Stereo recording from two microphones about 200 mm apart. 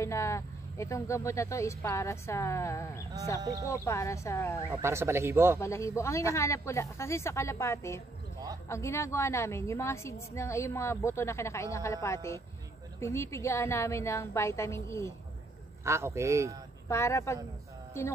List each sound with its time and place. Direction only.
0.0 s speech: 15° left (ahead or behind)
3.3 s a man's voice: 15° right (ahead or behind)
3.6 s speech: 15° left (ahead or behind)
4.8 s a man's voice: 15° right (ahead or behind)
5.6 s speech: 15° left (ahead or behind)
15.8 s a man's voice: 15° right (ahead or behind)
16.9 s speech: 15° left (ahead or behind)